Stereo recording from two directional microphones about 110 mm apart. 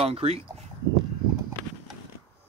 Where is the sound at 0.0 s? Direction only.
65° right (ahead or behind).